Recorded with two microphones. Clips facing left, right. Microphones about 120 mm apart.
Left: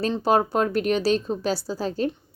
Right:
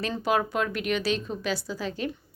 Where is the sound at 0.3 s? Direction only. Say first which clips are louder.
Left 5 dB; 35° left (ahead or behind).